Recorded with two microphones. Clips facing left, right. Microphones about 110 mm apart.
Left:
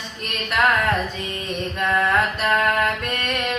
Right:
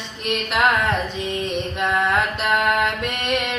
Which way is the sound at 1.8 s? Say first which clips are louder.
Left 1 dB; 25° right (ahead or behind).